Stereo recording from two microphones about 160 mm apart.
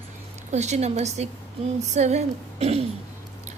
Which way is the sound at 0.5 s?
45° right (ahead or behind).